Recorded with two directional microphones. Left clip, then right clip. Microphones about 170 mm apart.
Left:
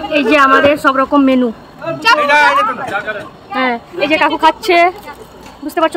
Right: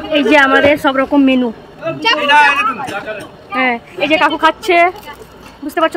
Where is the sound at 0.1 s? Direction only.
10° right (ahead or behind).